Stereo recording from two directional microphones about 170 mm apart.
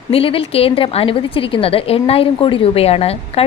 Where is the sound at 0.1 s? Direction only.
35° left (ahead or behind).